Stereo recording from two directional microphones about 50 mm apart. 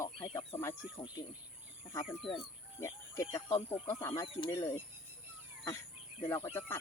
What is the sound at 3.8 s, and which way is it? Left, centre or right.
Speech, left.